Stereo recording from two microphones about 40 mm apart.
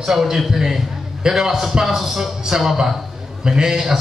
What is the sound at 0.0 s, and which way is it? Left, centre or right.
A man's voice, centre.